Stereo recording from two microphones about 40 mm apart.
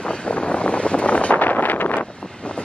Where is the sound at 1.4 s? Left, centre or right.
Left.